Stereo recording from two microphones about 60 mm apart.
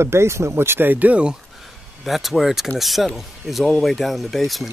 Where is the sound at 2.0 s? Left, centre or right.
Centre.